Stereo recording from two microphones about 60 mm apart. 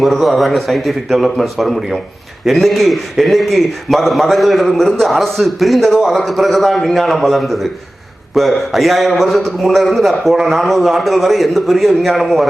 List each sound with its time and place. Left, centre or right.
0.0 s a man's voice: centre